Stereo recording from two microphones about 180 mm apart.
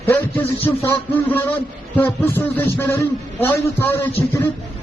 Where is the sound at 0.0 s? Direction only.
10° left (ahead or behind).